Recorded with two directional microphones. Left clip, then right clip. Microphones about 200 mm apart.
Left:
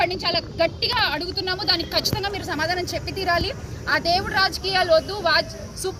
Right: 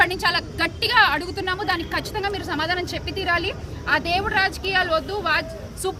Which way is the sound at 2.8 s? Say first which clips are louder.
Left 1 dB; 30° right (ahead or behind).